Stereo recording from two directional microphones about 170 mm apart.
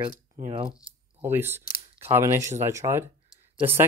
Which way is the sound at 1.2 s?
15° right (ahead or behind).